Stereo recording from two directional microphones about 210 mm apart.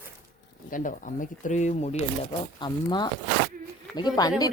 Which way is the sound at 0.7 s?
40° left (ahead or behind).